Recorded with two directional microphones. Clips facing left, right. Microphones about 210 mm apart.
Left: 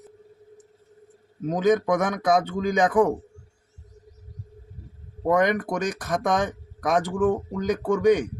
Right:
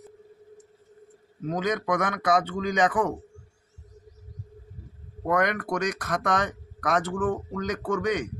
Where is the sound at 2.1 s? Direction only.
10° left (ahead or behind).